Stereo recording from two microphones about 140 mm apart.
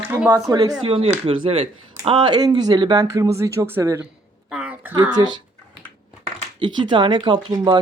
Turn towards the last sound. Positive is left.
turn(degrees=-30)  # may be behind; listen again after turning